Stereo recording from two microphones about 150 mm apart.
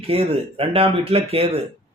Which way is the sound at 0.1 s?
40° right (ahead or behind).